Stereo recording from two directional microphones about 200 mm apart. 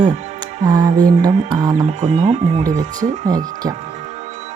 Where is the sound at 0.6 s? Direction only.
20° right (ahead or behind).